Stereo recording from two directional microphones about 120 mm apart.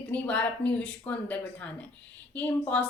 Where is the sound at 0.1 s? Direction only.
10° left (ahead or behind).